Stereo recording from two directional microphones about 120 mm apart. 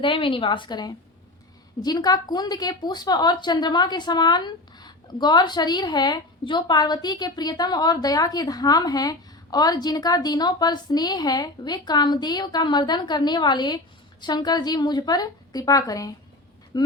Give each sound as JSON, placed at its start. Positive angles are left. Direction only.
{"t": 0.0, "sound": "a woman's voice", "side_deg": 45}